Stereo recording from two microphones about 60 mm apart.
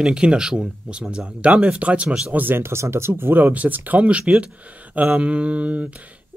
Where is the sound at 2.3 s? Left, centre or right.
Right.